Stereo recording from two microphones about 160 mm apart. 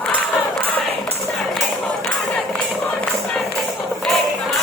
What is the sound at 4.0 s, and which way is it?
Music, centre (ahead or behind).